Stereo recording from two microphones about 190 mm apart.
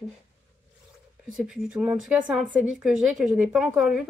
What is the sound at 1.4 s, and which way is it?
Speech, 5° right (ahead or behind).